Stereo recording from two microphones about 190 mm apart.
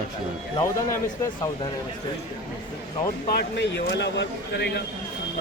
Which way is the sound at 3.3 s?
65° left (ahead or behind).